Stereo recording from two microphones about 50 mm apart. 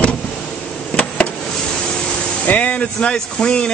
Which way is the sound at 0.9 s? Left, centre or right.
Centre.